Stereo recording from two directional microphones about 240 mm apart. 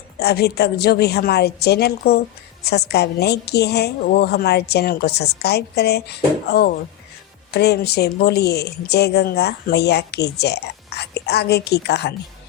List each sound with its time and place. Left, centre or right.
0.2 s a woman's voice: left